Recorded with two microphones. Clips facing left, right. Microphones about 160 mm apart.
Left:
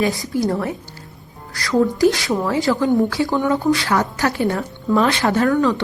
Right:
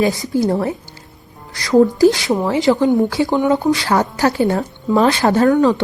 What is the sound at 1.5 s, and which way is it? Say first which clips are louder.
A woman's voice: right 5 dB; 20° right (ahead or behind).